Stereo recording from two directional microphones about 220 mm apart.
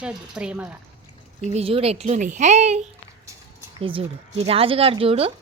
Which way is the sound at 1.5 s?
30° right (ahead or behind).